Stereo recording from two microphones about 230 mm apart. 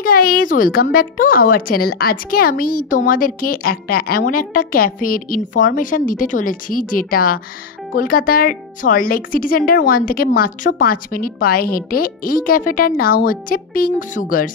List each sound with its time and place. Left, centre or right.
0.0 s a woman's voice: left